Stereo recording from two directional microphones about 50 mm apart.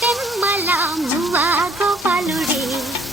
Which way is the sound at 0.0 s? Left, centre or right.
Centre.